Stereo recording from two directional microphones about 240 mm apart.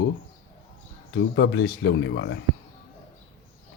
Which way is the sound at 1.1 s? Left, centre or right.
Left.